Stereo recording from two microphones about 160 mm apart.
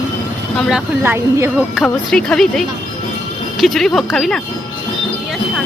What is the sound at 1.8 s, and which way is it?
Speech, 5° left (ahead or behind).